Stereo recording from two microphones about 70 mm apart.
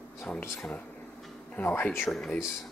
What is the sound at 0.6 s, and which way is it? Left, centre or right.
Speech, centre.